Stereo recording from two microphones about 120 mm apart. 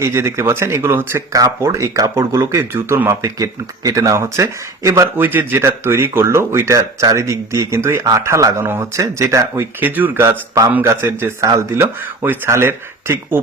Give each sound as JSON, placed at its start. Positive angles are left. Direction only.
{"t": 0.0, "sound": "speech", "side_deg": -20}